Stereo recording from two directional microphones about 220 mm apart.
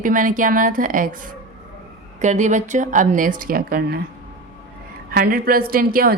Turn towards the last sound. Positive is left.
turn(degrees=-40)  # may be behind; listen again after turning